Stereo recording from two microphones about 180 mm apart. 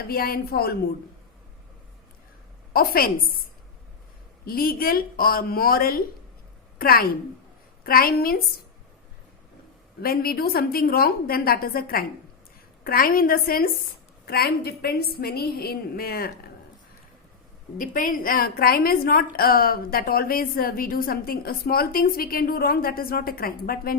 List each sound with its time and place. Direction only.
0.1 s a woman's voice: 55° left (ahead or behind)
2.7 s a woman's voice: 55° left (ahead or behind)
4.4 s a woman's voice: 55° left (ahead or behind)
10.0 s a woman's voice: 55° left (ahead or behind)
17.7 s a woman's voice: 50° left (ahead or behind)